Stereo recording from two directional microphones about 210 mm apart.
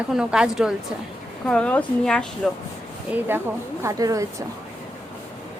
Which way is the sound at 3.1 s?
10° right (ahead or behind).